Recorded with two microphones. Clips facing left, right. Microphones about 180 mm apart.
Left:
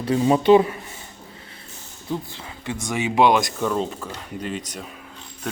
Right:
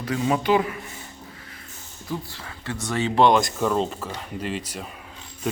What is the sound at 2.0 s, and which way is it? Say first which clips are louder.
Speech: left 3 dB; 20° left (ahead or behind).